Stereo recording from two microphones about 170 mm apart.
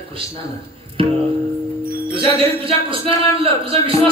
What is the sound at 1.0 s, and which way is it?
Music, 30° right (ahead or behind).